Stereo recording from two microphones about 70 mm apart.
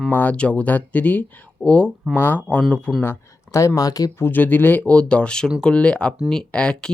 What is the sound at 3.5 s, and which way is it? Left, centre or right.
Speech, left.